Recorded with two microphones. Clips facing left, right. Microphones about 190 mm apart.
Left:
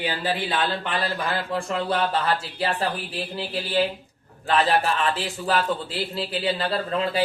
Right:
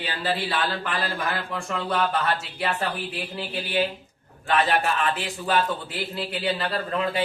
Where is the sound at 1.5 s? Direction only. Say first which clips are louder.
Left 4 dB; 30° left (ahead or behind).